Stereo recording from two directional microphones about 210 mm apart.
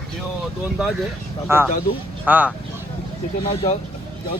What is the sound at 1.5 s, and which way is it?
Speech, 10° right (ahead or behind).